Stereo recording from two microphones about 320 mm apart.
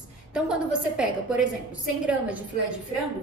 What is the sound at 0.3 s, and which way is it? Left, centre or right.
A woman's voice, centre.